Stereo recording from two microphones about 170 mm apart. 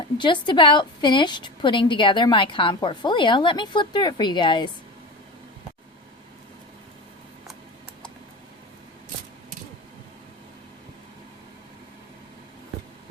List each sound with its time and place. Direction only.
0.2 s a woman's voice: 30° left (ahead or behind)